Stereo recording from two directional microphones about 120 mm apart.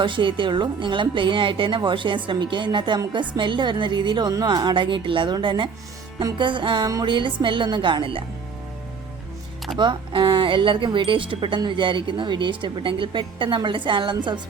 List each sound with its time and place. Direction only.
0.0 s a woman's voice: 45° right (ahead or behind)
9.7 s speech: 40° right (ahead or behind)